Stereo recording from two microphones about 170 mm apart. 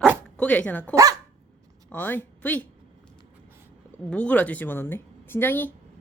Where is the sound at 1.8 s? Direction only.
10° left (ahead or behind).